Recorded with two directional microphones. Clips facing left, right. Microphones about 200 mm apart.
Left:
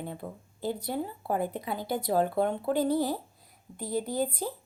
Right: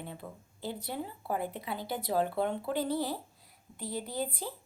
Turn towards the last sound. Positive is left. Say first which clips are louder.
# left 6 dB
turn(degrees=45)  # may be behind; listen again after turning